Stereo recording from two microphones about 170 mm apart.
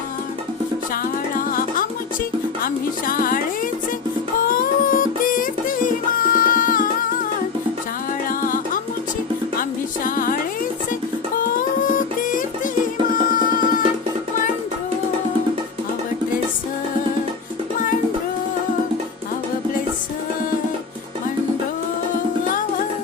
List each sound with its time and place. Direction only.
1.4 s music: 55° left (ahead or behind)
4.4 s music: 55° left (ahead or behind)
8.3 s music: 55° left (ahead or behind)
11.8 s music: 50° left (ahead or behind)